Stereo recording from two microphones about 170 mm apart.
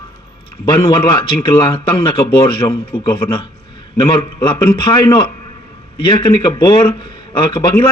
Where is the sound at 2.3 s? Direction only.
30° left (ahead or behind).